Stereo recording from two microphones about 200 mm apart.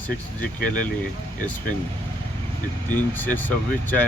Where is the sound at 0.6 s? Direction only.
40° left (ahead or behind).